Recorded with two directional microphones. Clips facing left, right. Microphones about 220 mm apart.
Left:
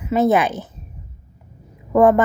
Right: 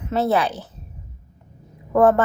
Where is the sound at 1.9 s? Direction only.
10° left (ahead or behind).